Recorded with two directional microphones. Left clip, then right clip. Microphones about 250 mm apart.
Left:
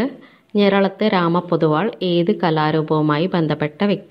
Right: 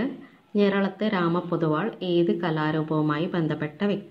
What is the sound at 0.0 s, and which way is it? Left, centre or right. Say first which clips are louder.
A woman's voice: left 7 dB; left.